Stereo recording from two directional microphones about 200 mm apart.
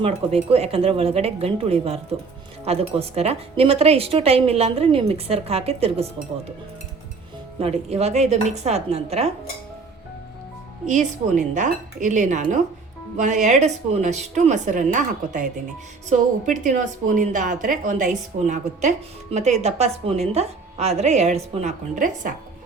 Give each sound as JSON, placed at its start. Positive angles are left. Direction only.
{"t": 0.0, "sound": "a woman's voice", "side_deg": -30}
{"t": 7.6, "sound": "a woman's voice", "side_deg": -30}
{"t": 10.8, "sound": "a woman's voice", "side_deg": -35}